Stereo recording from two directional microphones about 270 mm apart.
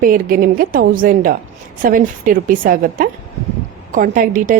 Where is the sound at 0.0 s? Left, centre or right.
Right.